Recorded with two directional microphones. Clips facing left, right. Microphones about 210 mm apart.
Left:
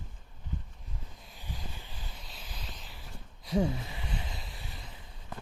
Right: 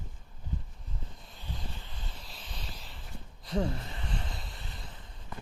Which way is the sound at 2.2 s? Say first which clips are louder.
Right 1 dB; 5° left (ahead or behind).